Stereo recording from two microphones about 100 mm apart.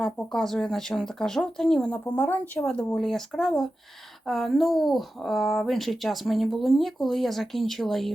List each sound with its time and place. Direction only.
0.0 s speech: 5° left (ahead or behind)
2.0 s speech: 15° left (ahead or behind)
2.6 s speech: 5° left (ahead or behind)